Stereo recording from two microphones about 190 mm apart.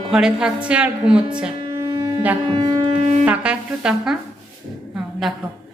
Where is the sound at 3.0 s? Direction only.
40° right (ahead or behind).